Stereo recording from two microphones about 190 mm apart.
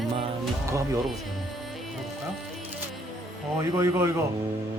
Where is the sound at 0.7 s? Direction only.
15° right (ahead or behind).